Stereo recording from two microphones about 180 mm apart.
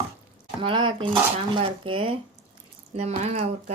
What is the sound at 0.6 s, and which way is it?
Speech, 25° right (ahead or behind).